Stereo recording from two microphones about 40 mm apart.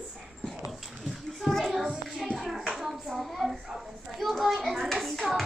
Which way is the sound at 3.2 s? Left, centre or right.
Centre.